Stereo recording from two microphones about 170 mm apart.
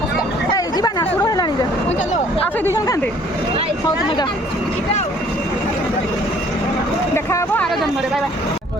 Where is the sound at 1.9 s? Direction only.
40° left (ahead or behind).